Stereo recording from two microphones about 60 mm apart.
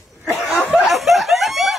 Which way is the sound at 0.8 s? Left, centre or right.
Centre.